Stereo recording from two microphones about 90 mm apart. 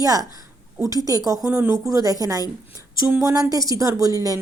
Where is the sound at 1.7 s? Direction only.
40° right (ahead or behind).